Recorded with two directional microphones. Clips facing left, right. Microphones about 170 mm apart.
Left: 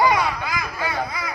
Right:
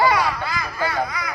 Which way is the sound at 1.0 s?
25° left (ahead or behind).